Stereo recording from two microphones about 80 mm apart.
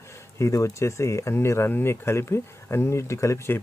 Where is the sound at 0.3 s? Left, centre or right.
Left.